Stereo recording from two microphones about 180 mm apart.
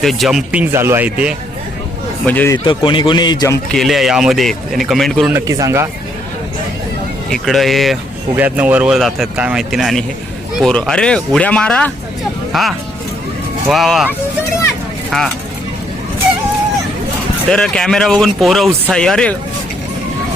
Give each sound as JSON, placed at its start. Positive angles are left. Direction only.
{"t": 0.0, "sound": "speech", "side_deg": 0}
{"t": 2.2, "sound": "speech", "side_deg": 10}
{"t": 2.6, "sound": "a man's voice", "side_deg": 30}
{"t": 3.7, "sound": "speech", "side_deg": 0}
{"t": 5.3, "sound": "speech", "side_deg": -15}
{"t": 7.3, "sound": "speech", "side_deg": 0}
{"t": 15.1, "sound": "speech", "side_deg": 5}
{"t": 17.5, "sound": "speech", "side_deg": 5}